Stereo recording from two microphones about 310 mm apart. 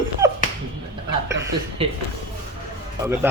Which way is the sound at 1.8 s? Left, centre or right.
Centre.